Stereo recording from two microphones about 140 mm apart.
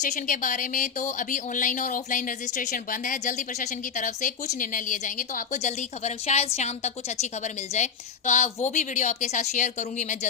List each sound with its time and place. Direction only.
0.0 s speech: 65° left (ahead or behind)